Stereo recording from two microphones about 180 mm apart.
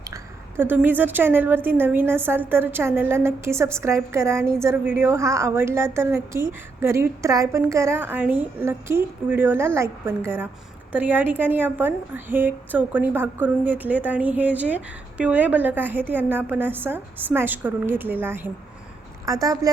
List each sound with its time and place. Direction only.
0.1 s a woman's voice: 15° right (ahead or behind)